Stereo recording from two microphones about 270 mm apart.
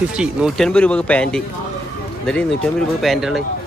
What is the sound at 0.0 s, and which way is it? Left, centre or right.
Speech, centre.